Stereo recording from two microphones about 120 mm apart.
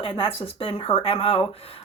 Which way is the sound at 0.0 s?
50° left (ahead or behind).